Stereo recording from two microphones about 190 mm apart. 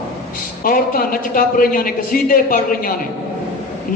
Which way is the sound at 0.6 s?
50° left (ahead or behind).